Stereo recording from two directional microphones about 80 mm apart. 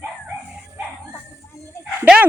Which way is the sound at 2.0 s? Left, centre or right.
Centre.